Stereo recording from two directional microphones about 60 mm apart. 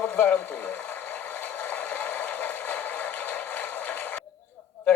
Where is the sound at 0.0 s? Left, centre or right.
Left.